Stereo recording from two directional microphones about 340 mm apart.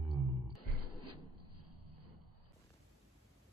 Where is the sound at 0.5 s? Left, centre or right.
Right.